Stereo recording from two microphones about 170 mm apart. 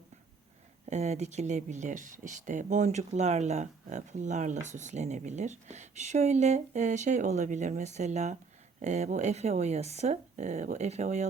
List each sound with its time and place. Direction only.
0.9 s speech: 40° right (ahead or behind)